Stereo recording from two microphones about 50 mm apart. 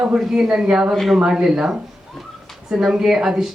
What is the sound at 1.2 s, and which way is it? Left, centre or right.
Speech, centre.